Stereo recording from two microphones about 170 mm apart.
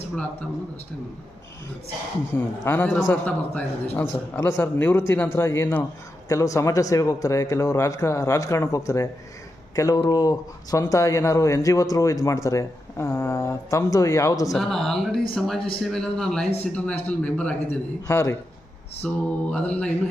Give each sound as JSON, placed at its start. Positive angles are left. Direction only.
{"t": 2.3, "sound": "speech", "side_deg": 10}
{"t": 14.5, "sound": "speech", "side_deg": 0}